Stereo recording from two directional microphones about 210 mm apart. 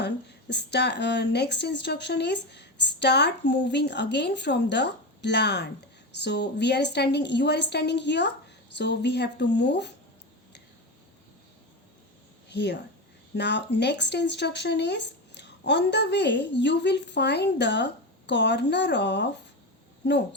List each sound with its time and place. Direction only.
0.0 s a woman's voice: 55° left (ahead or behind)
12.5 s a woman's voice: 55° left (ahead or behind)